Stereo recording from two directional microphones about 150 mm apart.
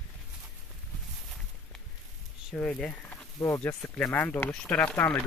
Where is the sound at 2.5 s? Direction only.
5° left (ahead or behind).